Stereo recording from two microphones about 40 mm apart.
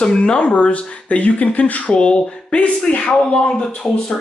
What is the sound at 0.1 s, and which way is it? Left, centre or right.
Speech, left.